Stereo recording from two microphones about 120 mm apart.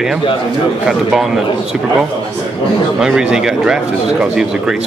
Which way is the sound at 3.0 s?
5° right (ahead or behind).